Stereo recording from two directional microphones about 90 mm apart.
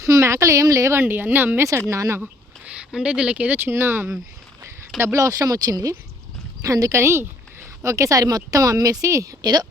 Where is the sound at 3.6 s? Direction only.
25° right (ahead or behind).